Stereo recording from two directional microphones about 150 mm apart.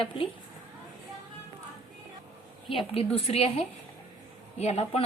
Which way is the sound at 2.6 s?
35° left (ahead or behind).